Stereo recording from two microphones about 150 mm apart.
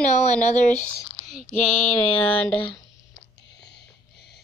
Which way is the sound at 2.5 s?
35° left (ahead or behind).